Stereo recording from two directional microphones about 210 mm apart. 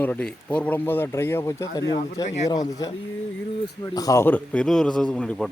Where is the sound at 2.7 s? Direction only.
15° left (ahead or behind).